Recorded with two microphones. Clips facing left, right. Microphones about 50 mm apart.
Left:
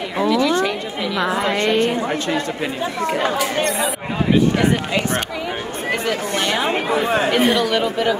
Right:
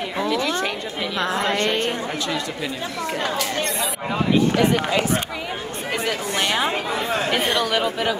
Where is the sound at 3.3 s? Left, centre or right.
Centre.